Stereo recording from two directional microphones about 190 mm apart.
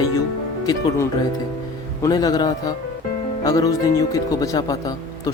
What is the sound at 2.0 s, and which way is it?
Speech, 20° left (ahead or behind).